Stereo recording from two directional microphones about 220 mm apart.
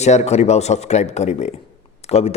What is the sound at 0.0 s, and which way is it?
A man's voice, 30° left (ahead or behind).